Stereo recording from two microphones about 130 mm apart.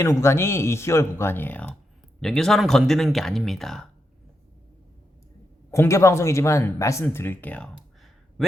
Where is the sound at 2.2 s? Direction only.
5° left (ahead or behind).